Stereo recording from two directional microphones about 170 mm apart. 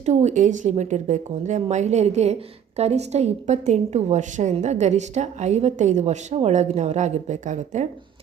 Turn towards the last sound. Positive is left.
turn(degrees=-45)  # may be behind; listen again after turning